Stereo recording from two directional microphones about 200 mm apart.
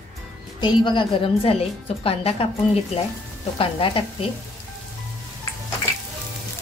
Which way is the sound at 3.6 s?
25° left (ahead or behind).